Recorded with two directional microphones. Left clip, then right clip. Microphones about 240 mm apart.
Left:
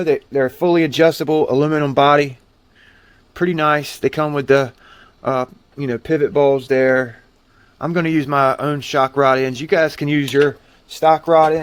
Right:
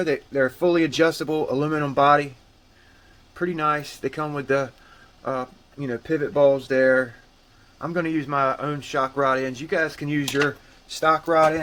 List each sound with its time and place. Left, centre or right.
0.0 s speech: left
3.3 s speech: left